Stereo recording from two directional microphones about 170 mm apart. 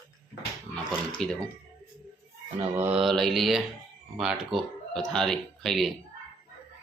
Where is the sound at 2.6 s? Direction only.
15° right (ahead or behind).